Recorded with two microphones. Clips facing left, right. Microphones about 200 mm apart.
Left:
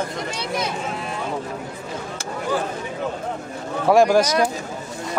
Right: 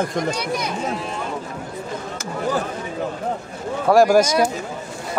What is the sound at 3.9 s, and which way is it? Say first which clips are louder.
Speech: right 1 dB; 5° right (ahead or behind).